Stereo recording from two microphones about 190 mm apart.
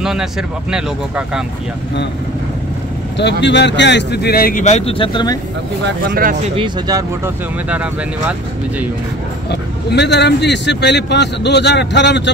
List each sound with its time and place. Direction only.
0.0 s speech: 5° right (ahead or behind)
3.2 s a man's voice: 65° left (ahead or behind); by 5.4 s 20° left (ahead or behind)
5.9 s speech: 55° right (ahead or behind)
6.5 s speech: 25° right (ahead or behind)
7.7 s speech: 5° right (ahead or behind)
9.5 s a man's voice: 60° left (ahead or behind)